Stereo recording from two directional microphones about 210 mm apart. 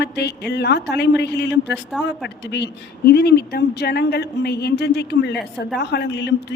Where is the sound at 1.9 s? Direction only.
Centre (ahead or behind).